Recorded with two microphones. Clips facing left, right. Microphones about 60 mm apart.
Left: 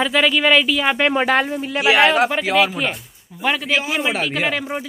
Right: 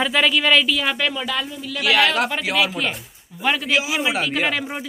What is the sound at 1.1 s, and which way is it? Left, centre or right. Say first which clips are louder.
Speech: left 9 dB; left.